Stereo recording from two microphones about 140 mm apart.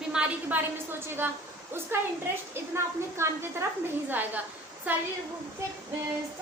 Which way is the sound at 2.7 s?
20° right (ahead or behind).